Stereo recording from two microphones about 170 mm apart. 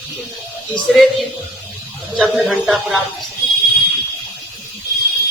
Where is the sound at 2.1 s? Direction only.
Centre (ahead or behind).